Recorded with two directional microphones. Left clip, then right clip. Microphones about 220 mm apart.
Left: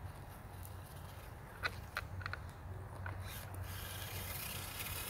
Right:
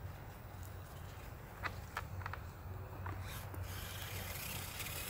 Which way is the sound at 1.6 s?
30° left (ahead or behind).